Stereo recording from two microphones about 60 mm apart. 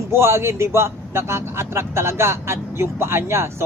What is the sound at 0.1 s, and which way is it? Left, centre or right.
Speech, right.